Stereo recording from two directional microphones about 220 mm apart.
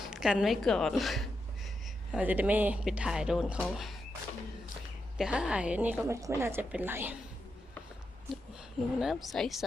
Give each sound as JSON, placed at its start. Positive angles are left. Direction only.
{"t": 0.0, "sound": "speech", "side_deg": 0}
{"t": 5.1, "sound": "a woman's voice", "side_deg": -5}
{"t": 9.0, "sound": "speech", "side_deg": 0}